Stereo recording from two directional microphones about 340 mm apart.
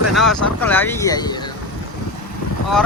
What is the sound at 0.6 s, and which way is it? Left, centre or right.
Speech, centre.